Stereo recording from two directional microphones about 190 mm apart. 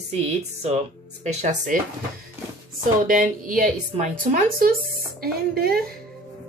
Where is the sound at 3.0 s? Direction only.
45° right (ahead or behind).